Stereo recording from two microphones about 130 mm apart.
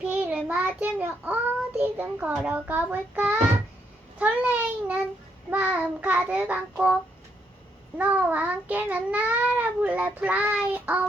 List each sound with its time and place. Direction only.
0.1 s child singing: 10° right (ahead or behind)